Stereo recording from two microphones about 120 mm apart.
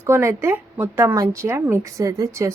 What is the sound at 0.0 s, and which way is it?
Speech, 20° right (ahead or behind).